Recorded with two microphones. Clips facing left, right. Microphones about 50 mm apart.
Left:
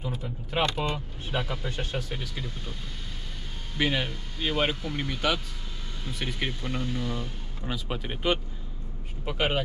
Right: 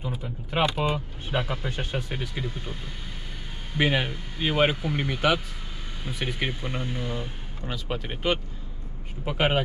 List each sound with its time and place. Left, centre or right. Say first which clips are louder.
0.0 s speech: right 1 dB; centre
7.9 s speech: right 1 dB; centre